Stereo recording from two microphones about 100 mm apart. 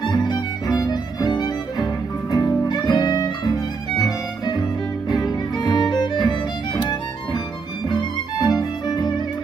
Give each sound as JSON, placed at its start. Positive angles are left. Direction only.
{"t": 0.0, "sound": "music", "side_deg": 50}
{"t": 5.6, "sound": "music", "side_deg": 45}